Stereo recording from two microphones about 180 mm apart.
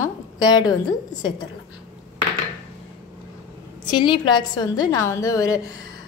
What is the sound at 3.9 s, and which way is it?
A woman's voice, 25° left (ahead or behind).